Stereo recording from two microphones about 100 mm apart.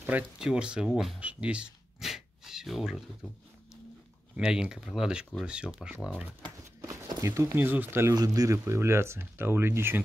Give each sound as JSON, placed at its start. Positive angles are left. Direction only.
{"t": 0.4, "sound": "speech", "side_deg": -10}
{"t": 4.4, "sound": "speech", "side_deg": -10}
{"t": 6.9, "sound": "a sound", "side_deg": -30}
{"t": 7.5, "sound": "speech", "side_deg": -20}
{"t": 8.1, "sound": "speech", "side_deg": -35}